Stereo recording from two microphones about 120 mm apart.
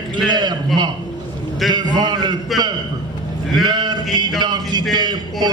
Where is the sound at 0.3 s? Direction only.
35° right (ahead or behind).